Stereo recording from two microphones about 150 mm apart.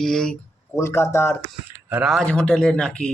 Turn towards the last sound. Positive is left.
turn(degrees=5)  # may be behind; listen again after turning